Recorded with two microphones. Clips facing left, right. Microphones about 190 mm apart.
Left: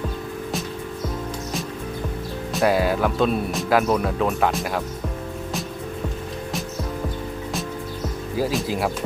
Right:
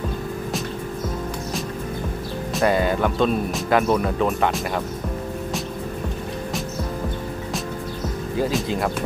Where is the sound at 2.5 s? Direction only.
5° left (ahead or behind).